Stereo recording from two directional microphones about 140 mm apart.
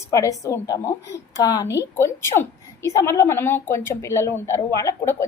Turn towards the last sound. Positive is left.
turn(degrees=20)  # may be behind; listen again after turning